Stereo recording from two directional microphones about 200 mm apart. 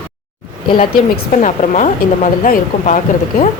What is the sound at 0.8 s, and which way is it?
Speech, 40° left (ahead or behind).